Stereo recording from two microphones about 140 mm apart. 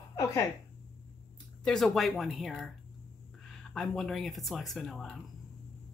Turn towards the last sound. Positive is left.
turn(degrees=0)  # may be behind; listen again after turning